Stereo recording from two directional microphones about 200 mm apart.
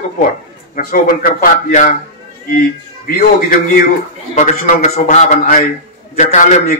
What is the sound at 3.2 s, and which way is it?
A man's voice, 45° left (ahead or behind).